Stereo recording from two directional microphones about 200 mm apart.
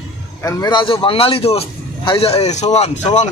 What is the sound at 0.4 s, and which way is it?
A man's voice, 20° left (ahead or behind).